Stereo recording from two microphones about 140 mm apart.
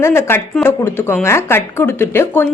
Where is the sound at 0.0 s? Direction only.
15° left (ahead or behind).